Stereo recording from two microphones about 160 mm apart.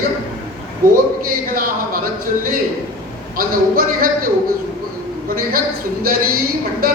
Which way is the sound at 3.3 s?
60° right (ahead or behind).